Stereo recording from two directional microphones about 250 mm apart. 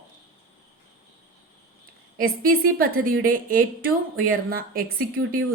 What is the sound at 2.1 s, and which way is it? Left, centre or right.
A woman's voice, right.